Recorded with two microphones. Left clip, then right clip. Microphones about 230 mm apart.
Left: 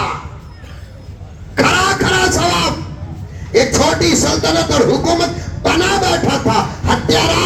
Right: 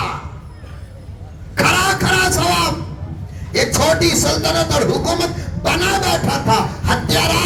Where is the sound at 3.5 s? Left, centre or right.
Right.